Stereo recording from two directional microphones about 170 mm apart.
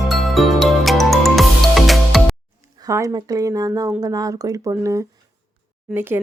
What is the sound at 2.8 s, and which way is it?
Speech, 20° right (ahead or behind).